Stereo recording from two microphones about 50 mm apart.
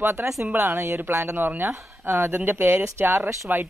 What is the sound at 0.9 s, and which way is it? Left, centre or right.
Speech, right.